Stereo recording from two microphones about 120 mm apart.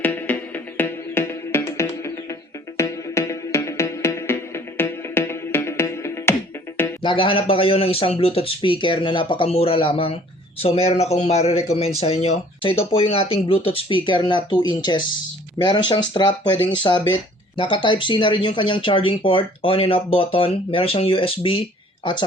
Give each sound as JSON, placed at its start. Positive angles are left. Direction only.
{"t": 0.0, "sound": "music", "side_deg": 15}
{"t": 7.0, "sound": "a woman's voice", "side_deg": 45}